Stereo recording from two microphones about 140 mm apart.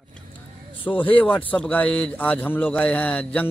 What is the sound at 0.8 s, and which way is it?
A man's voice, 10° left (ahead or behind).